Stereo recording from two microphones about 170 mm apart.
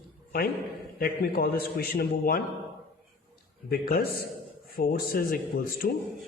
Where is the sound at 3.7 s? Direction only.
65° left (ahead or behind).